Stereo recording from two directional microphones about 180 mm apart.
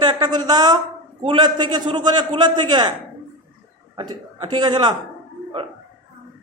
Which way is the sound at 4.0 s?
25° right (ahead or behind).